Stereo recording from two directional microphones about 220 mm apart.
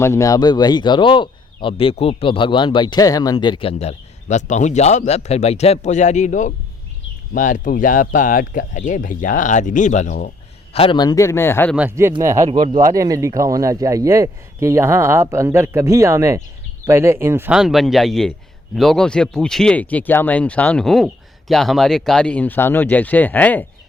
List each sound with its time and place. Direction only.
0.0 s speech: 15° left (ahead or behind); by 10.3 s 35° left (ahead or behind)
10.8 s speech: 20° left (ahead or behind)
11.8 s speech: 10° right (ahead or behind); by 23.6 s 10° left (ahead or behind)